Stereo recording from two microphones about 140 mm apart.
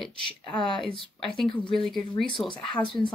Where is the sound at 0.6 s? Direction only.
35° left (ahead or behind).